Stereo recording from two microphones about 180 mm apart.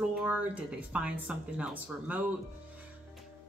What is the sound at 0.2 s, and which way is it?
A man's voice, 5° right (ahead or behind).